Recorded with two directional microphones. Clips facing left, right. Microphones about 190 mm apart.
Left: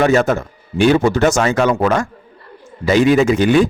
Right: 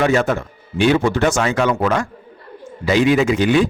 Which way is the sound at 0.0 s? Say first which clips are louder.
Left 3 dB; 45° left (ahead or behind).